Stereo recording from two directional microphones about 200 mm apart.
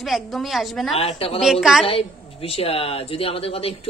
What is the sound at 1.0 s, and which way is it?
Speech, 30° left (ahead or behind).